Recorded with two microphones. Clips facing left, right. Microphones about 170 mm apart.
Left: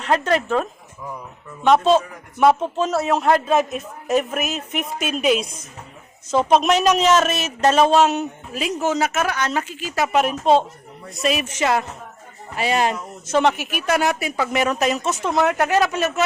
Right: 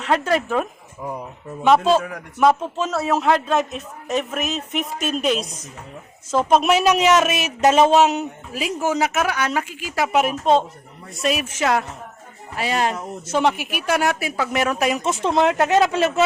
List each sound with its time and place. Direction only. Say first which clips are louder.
0.0 s a woman's voice: even; centre (ahead or behind)
1.0 s speech: right 4 dB; 30° right (ahead or behind)
1.6 s a man's voice: left 1 dB; 5° right (ahead or behind)
15.0 s speech: right 1 dB; 25° right (ahead or behind)